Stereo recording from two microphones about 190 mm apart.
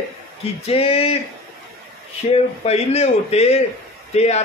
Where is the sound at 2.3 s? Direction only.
35° left (ahead or behind).